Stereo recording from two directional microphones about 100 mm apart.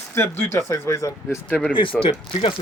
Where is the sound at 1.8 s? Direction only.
60° left (ahead or behind).